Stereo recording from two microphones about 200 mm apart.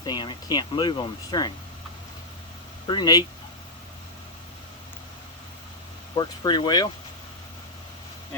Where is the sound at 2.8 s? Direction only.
20° left (ahead or behind).